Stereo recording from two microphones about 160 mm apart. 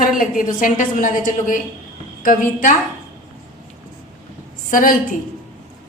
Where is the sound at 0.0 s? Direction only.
55° left (ahead or behind).